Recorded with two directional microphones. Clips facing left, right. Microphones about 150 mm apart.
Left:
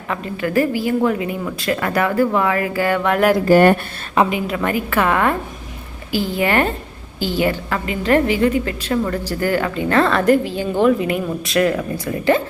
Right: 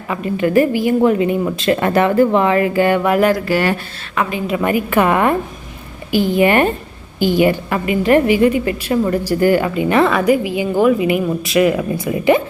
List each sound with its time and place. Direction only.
0.3 s a woman's voice: 20° right (ahead or behind)
3.0 s a woman's voice: 5° right (ahead or behind)
3.4 s speech: 50° left (ahead or behind)
4.4 s a woman's voice: 15° right (ahead or behind)